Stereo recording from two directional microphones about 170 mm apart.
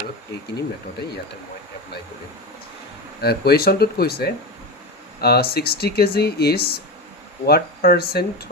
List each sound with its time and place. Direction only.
3.2 s speech: 65° left (ahead or behind)